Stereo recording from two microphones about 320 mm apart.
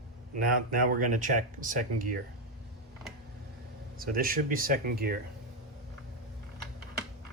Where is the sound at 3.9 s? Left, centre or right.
Right.